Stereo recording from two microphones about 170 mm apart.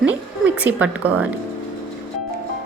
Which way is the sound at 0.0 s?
10° right (ahead or behind).